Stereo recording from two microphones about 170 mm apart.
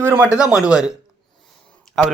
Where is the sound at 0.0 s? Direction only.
15° right (ahead or behind).